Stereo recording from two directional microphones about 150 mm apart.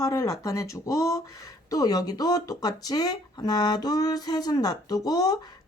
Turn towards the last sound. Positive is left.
turn(degrees=25)  # may be behind; listen again after turning